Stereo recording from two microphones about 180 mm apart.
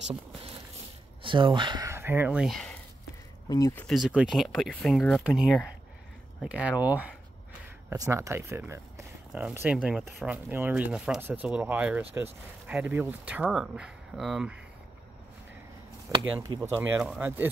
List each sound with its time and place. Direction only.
0.0 s speech: 30° right (ahead or behind); by 2.7 s centre (ahead or behind)
3.4 s speech: 20° left (ahead or behind)
3.8 s speech: centre (ahead or behind)
16.2 s speech: 15° right (ahead or behind)
16.9 s speech: 5° right (ahead or behind)